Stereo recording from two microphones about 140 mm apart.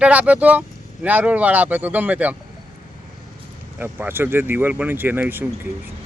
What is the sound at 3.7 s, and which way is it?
Speech, 15° right (ahead or behind).